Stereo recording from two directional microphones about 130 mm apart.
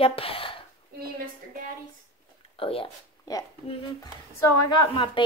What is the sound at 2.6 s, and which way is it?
Speech, 45° left (ahead or behind).